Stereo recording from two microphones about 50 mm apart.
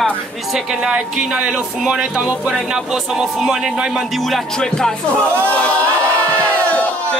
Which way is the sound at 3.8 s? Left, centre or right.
Centre.